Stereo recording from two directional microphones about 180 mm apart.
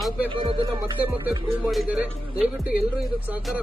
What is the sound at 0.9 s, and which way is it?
Speech, 10° right (ahead or behind).